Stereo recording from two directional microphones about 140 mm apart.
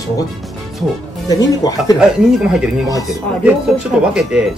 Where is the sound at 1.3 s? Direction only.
25° left (ahead or behind).